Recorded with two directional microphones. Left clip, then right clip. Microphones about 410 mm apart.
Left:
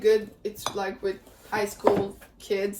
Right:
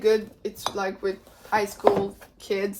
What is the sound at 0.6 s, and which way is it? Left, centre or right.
Speech, centre.